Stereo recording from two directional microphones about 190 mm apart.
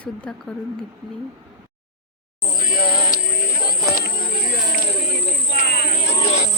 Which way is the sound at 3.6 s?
50° left (ahead or behind).